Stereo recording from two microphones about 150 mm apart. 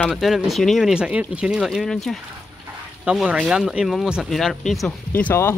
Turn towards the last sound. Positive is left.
turn(degrees=15)  # may be behind; listen again after turning